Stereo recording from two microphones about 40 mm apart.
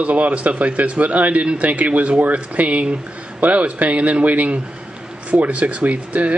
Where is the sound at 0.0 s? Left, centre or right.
Right.